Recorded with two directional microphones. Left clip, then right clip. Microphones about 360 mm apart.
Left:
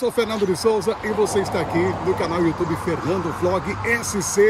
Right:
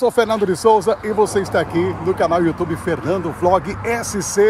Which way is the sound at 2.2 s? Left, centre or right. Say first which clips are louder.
Right 6 dB; centre.